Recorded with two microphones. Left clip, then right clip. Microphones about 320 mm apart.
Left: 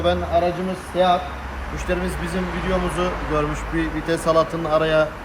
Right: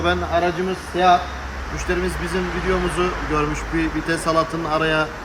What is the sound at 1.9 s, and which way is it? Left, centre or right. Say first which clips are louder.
Speech: right 1 dB; centre.